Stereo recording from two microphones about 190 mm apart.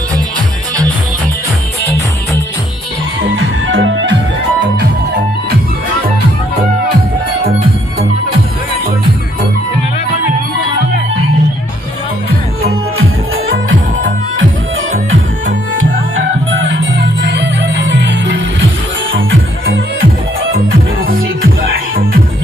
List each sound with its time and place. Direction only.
3.3 s music: 75° right (ahead or behind)
4.8 s music: 55° right (ahead or behind)
12.6 s music: 90° right
15.4 s music: 90° right; by 18.3 s 70° right (ahead or behind)
20.5 s music: 50° right (ahead or behind)